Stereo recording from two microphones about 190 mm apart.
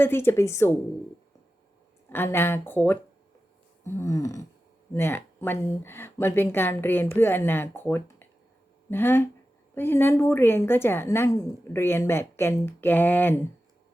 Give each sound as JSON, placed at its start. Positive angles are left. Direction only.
{"t": 0.0, "sound": "a woman's voice", "side_deg": 10}
{"t": 2.0, "sound": "a woman's voice", "side_deg": 10}